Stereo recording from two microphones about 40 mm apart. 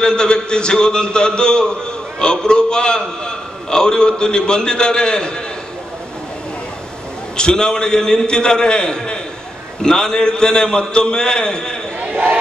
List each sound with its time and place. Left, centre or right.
0.0 s a man's voice: left
7.3 s a man's voice: left
12.1 s a sound: right